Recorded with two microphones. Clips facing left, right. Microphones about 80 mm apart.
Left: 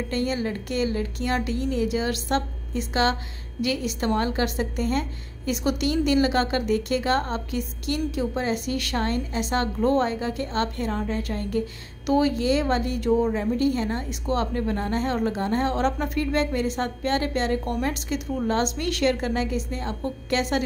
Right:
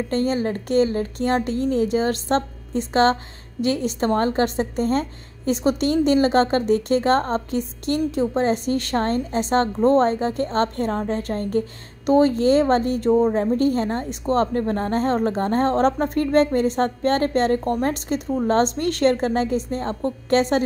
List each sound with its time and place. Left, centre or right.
0.1 s a woman's voice: right